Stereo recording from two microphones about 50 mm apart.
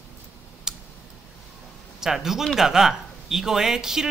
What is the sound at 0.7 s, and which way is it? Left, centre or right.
Tick, centre.